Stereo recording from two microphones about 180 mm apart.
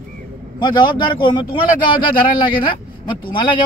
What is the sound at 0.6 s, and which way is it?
Speech, 25° left (ahead or behind).